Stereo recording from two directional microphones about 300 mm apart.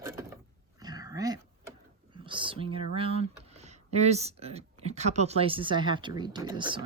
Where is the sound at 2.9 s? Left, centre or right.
Centre.